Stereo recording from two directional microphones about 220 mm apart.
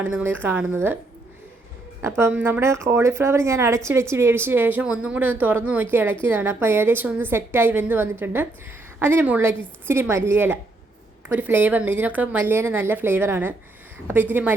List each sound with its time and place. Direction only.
0.0 s speech: 10° right (ahead or behind)
2.0 s speech: 10° right (ahead or behind)